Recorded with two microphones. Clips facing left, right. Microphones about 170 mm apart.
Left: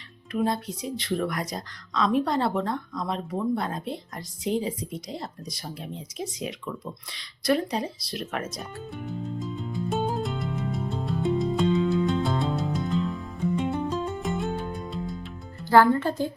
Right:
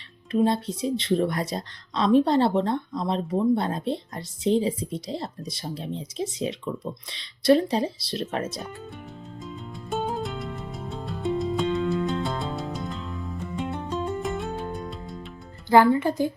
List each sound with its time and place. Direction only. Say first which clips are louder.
0.3 s speech: right 4 dB; 25° right (ahead or behind)
9.0 s music: left 6 dB; centre (ahead or behind)
15.7 s speech: right 1 dB; 15° right (ahead or behind)